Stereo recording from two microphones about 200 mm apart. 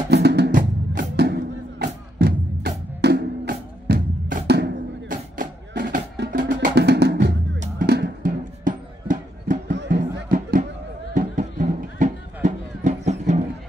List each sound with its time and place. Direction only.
0.1 s music: 55° right (ahead or behind)
0.6 s music: 40° right (ahead or behind)
1.1 s music: 55° right (ahead or behind)
9.8 s music: 60° right (ahead or behind)
11.1 s music: 40° right (ahead or behind)